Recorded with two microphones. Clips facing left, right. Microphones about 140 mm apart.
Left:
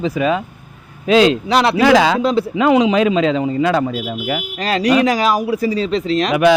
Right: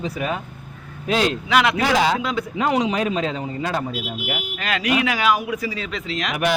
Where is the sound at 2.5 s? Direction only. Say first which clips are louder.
Left 7 dB; 90° left.